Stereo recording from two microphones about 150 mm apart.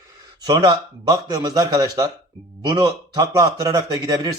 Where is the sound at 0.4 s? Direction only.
30° right (ahead or behind).